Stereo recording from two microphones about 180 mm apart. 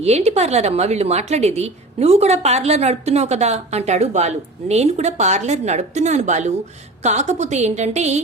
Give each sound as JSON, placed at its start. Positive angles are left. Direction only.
{"t": 0.0, "sound": "a woman's voice", "side_deg": -35}